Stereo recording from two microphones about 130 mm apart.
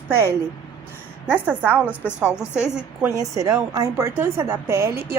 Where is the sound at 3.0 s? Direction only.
25° right (ahead or behind).